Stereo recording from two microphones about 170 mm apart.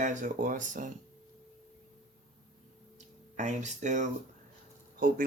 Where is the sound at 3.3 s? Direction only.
45° right (ahead or behind).